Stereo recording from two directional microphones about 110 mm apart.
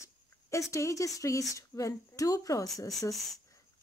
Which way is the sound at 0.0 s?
30° left (ahead or behind).